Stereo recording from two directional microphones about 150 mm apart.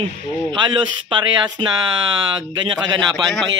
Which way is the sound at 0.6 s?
35° right (ahead or behind).